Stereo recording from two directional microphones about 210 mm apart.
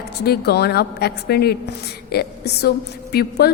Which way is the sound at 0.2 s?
50° left (ahead or behind).